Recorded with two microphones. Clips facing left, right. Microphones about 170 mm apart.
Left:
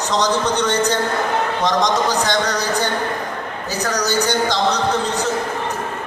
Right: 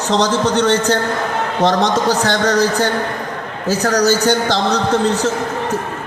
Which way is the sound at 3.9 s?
40° right (ahead or behind).